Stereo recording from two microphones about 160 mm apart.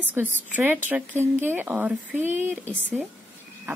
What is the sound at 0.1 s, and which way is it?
Speech, 10° right (ahead or behind).